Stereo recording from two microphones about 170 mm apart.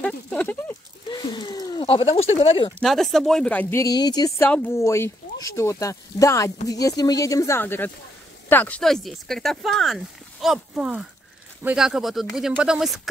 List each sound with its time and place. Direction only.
0.0 s speech: 5° left (ahead or behind)
1.0 s a sound: 25° left (ahead or behind)
1.9 s speech: 35° left (ahead or behind)
2.8 s speech: centre (ahead or behind)
3.8 s speech: 25° left (ahead or behind); by 13.1 s centre (ahead or behind)